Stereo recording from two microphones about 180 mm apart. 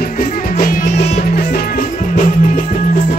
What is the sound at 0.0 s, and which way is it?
Music, 55° left (ahead or behind).